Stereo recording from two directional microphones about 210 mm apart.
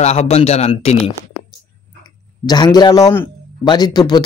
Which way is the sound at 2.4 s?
20° left (ahead or behind).